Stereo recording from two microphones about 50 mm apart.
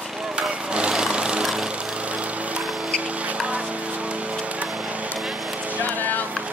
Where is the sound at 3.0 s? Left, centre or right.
Right.